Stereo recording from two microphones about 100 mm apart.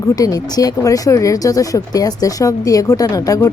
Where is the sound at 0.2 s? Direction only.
40° left (ahead or behind).